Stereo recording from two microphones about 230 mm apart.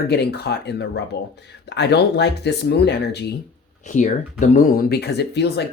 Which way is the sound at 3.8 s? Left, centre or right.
Left.